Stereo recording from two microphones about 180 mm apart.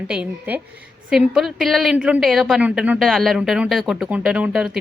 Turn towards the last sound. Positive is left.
turn(degrees=-5)  # may be behind; listen again after turning